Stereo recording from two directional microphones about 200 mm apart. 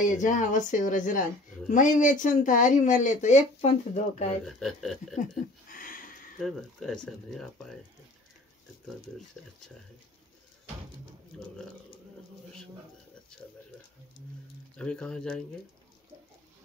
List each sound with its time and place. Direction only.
0.0 s speech: 40° left (ahead or behind)
4.5 s speech: centre (ahead or behind)
5.1 s a sound: 40° left (ahead or behind)
6.4 s speech: centre (ahead or behind)
14.8 s speech: 5° left (ahead or behind)